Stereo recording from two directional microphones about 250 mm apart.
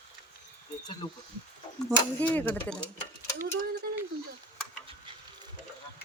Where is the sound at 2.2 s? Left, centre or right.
Centre.